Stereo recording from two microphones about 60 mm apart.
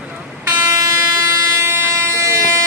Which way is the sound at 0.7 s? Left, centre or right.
Right.